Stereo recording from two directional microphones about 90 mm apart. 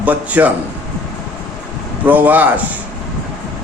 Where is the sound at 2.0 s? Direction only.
20° right (ahead or behind).